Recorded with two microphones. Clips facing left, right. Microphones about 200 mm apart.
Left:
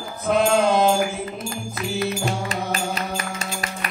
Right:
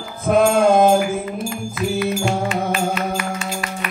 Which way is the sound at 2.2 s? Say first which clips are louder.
Right 5 dB; 35° left (ahead or behind).